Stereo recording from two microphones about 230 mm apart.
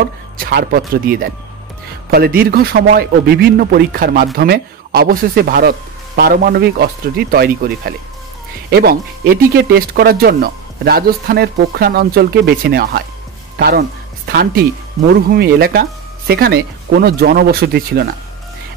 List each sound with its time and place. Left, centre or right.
0.4 s a man's voice: right